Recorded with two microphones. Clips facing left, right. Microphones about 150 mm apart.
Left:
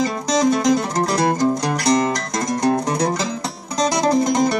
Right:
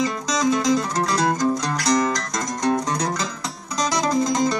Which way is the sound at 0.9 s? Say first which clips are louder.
Left 3 dB; 30° left (ahead or behind).